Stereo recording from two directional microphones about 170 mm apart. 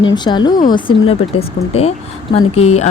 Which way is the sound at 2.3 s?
35° left (ahead or behind).